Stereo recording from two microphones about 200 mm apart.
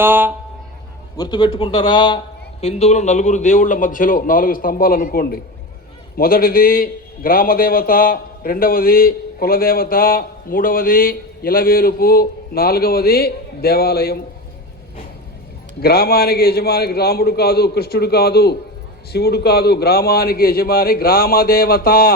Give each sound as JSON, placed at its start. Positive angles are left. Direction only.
{"t": 0.0, "sound": "speech", "side_deg": -10}
{"t": 1.1, "sound": "a man's voice", "side_deg": 20}
{"t": 15.8, "sound": "a man's voice", "side_deg": 50}